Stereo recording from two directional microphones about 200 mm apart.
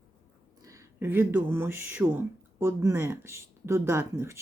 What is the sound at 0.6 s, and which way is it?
Speech, 15° right (ahead or behind).